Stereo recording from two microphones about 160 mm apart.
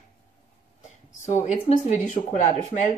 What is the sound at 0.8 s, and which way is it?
Speech, 45° left (ahead or behind).